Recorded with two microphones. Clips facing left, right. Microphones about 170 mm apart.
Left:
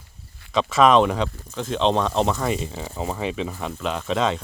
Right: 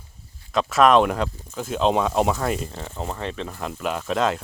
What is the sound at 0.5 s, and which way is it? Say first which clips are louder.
Speech: even; centre (ahead or behind).